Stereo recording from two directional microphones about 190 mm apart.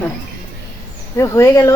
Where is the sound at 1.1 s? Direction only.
15° left (ahead or behind).